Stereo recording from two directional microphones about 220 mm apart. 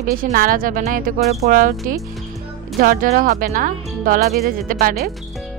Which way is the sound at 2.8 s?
40° right (ahead or behind).